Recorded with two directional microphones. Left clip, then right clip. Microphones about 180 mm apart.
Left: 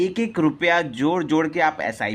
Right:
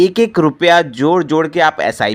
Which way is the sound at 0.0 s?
25° right (ahead or behind).